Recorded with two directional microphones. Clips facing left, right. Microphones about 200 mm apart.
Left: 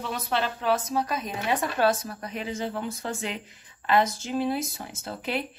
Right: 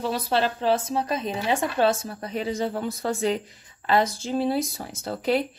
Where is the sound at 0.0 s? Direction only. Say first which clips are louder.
Right 4 dB; 35° right (ahead or behind).